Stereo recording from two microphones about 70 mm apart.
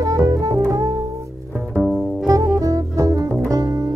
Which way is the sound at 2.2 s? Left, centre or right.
Right.